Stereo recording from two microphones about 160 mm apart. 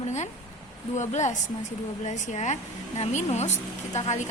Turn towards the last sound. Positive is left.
turn(degrees=45)  # may be behind; listen again after turning